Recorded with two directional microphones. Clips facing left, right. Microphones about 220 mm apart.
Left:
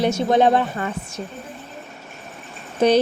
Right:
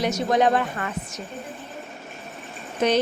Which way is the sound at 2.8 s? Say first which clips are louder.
Left 5 dB; 35° left (ahead or behind).